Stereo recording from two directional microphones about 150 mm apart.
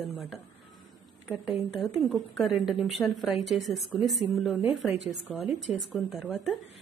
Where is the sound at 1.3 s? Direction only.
5° right (ahead or behind).